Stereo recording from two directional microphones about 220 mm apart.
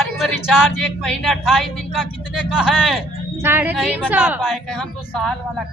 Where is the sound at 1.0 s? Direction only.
Centre (ahead or behind).